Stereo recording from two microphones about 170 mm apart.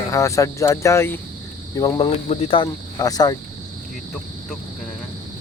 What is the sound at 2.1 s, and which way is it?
Speech, 40° left (ahead or behind).